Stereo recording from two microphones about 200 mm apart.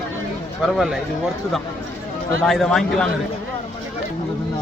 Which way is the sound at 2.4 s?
Centre (ahead or behind).